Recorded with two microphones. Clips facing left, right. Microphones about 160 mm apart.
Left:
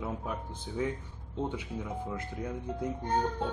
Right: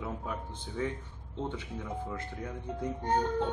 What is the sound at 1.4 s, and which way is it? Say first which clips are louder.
Speech: left 1 dB; 10° left (ahead or behind).